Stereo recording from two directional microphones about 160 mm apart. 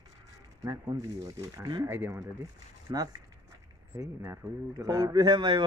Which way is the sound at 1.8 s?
15° right (ahead or behind).